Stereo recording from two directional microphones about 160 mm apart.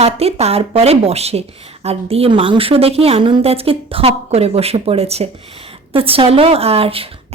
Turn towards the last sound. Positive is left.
turn(degrees=-35)  # may be behind; listen again after turning